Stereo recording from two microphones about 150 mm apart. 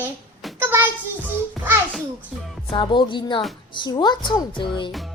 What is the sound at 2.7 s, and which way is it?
A woman's voice, 35° left (ahead or behind).